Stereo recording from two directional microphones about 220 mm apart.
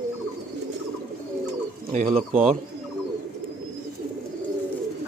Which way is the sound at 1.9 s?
35° right (ahead or behind).